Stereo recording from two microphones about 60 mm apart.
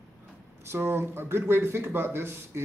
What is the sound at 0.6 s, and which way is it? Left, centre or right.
Speech, right.